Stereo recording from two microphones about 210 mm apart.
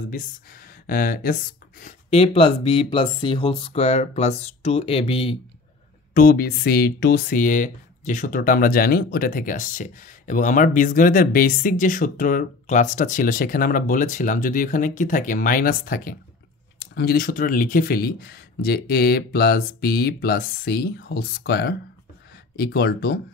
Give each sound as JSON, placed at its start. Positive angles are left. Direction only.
{"t": 0.1, "sound": "speech", "side_deg": 40}
{"t": 6.1, "sound": "speech", "side_deg": 45}